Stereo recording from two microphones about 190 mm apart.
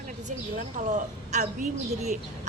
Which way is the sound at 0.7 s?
40° right (ahead or behind).